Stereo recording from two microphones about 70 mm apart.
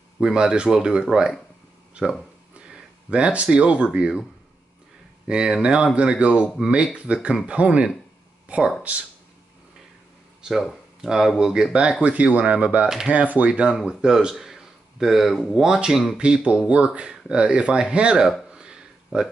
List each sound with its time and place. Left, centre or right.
0.2 s speech: centre
2.7 s a sound: centre
3.4 s speech: centre
5.2 s speech: centre
10.5 s speech: centre
12.8 s speech: centre
13.1 s speech: right
18.5 s a sound: centre